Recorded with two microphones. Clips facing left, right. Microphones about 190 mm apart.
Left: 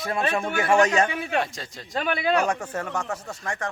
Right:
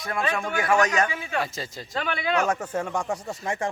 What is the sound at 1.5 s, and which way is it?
Speech, centre (ahead or behind).